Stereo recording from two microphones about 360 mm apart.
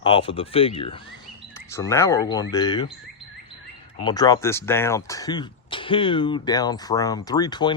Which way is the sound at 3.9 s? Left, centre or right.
Centre.